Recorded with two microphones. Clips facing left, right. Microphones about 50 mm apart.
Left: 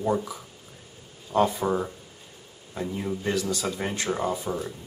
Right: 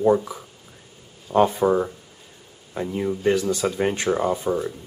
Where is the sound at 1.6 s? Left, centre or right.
Centre.